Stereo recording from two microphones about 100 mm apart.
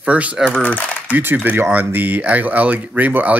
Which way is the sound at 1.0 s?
20° right (ahead or behind).